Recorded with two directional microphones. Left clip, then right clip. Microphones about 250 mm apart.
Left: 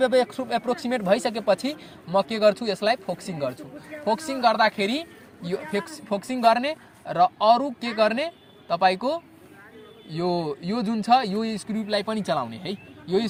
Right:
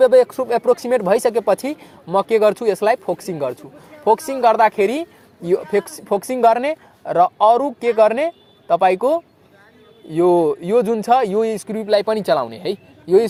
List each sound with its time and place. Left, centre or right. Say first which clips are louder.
0.0 s speech: right 9 dB; right